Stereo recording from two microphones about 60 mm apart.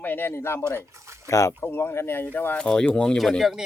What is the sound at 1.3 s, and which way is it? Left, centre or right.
Speech, left.